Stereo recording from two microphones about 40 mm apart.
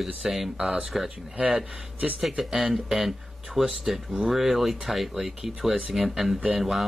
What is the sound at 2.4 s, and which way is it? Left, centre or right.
Speech, centre.